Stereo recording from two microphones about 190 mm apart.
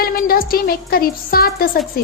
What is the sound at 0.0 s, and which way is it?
A woman's voice, 50° left (ahead or behind).